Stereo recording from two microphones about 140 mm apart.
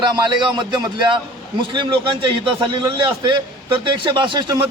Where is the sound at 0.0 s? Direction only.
30° right (ahead or behind).